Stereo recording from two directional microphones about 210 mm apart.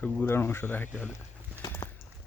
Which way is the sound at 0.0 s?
10° left (ahead or behind).